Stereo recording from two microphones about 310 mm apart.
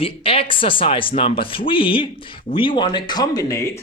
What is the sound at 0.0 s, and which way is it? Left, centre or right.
Speech, centre.